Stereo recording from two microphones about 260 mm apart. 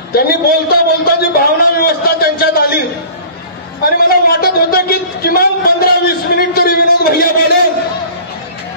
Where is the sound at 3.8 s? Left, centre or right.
Left.